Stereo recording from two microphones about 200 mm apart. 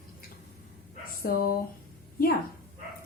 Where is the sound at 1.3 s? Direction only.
50° left (ahead or behind).